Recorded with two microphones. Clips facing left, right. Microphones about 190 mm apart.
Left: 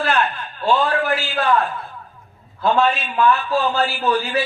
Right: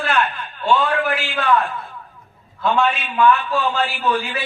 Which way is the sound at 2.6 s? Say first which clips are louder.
Left 1 dB; 40° left (ahead or behind).